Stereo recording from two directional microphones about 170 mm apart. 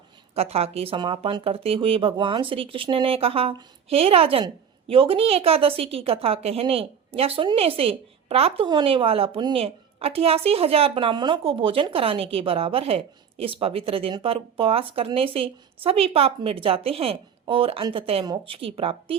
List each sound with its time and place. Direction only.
0.3 s speech: 35° right (ahead or behind)